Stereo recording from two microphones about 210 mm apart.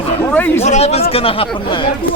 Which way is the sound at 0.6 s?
30° left (ahead or behind).